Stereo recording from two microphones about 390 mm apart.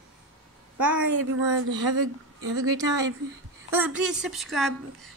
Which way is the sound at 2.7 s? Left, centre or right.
Centre.